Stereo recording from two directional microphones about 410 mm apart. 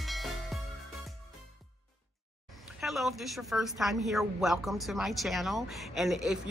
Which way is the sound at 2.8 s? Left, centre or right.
Centre.